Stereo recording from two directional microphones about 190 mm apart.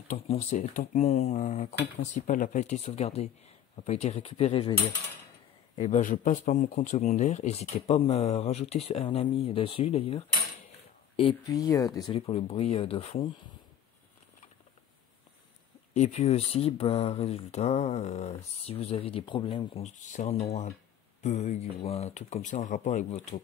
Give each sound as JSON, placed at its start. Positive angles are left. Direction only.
{"t": 0.3, "sound": "speech", "side_deg": 35}
{"t": 5.8, "sound": "speech", "side_deg": 40}
{"t": 11.4, "sound": "speech", "side_deg": 20}
{"t": 12.1, "sound": "speech", "side_deg": 30}
{"t": 15.9, "sound": "speech", "side_deg": 35}